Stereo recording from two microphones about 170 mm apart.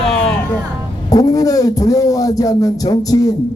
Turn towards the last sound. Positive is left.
turn(degrees=20)  # may be behind; listen again after turning